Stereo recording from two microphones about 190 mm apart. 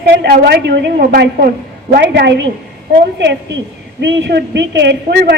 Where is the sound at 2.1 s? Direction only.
60° right (ahead or behind).